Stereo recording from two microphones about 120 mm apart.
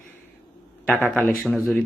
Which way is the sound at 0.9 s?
15° left (ahead or behind).